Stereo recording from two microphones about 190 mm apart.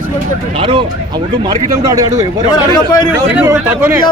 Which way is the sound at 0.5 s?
25° right (ahead or behind).